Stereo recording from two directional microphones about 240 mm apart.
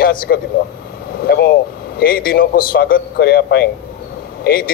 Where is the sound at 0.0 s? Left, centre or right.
Left.